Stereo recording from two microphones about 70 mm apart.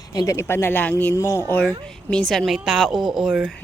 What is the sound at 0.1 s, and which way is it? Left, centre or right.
Speech, left.